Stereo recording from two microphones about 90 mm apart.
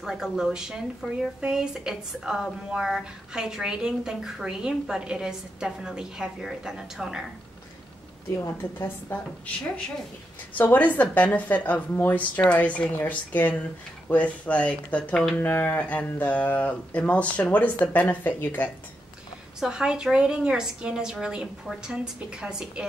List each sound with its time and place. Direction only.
0.0 s speech: 5° right (ahead or behind)
8.7 s a woman's voice: 25° left (ahead or behind)
10.6 s a woman's voice: 20° left (ahead or behind)
19.6 s speech: 10° right (ahead or behind)